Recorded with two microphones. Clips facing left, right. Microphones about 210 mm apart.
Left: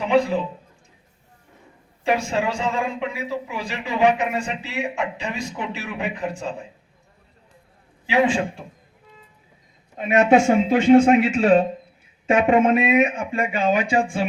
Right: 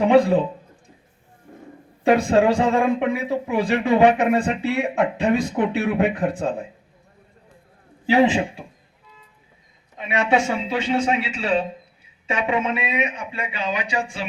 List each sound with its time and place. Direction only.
0.0 s a man's voice: 55° right (ahead or behind)
2.0 s speech: 55° right (ahead or behind)
8.0 s a man's voice: 35° right (ahead or behind)
10.0 s speech: 45° left (ahead or behind)